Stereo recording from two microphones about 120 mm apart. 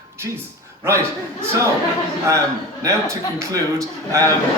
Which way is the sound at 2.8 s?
25° right (ahead or behind).